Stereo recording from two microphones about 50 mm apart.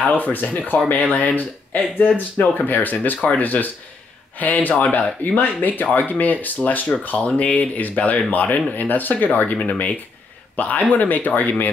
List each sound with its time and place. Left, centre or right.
0.0 s speech: left